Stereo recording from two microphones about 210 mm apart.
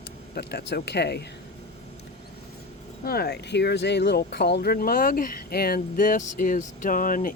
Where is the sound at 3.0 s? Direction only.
45° left (ahead or behind).